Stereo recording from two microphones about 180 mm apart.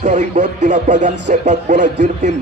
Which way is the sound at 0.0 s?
40° right (ahead or behind).